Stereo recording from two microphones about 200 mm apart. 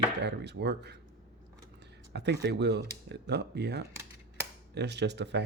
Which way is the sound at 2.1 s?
55° right (ahead or behind).